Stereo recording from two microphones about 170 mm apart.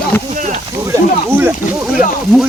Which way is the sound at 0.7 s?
15° right (ahead or behind).